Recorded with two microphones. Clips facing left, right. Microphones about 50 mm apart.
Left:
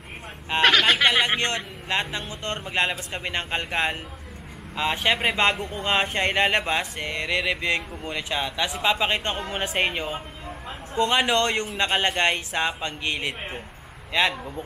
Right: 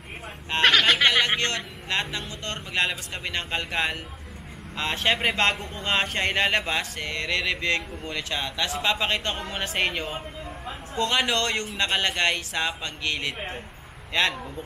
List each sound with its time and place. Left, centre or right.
0.5 s a sound: centre
1.2 s a man's voice: centre
4.7 s a man's voice: centre